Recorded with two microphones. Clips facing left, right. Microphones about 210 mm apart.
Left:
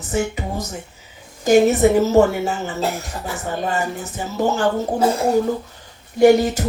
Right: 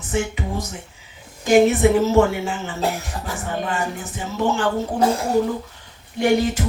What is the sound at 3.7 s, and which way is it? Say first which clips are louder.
Speech: left 2 dB; 40° left (ahead or behind).